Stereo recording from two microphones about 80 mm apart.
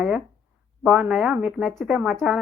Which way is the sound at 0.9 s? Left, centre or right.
Centre.